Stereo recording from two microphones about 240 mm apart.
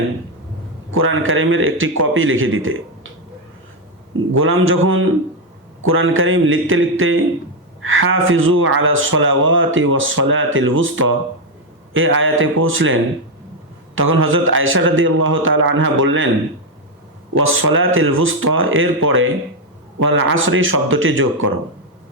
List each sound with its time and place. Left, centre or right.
0.9 s speech: right
4.4 s speech: right
17.3 s speech: right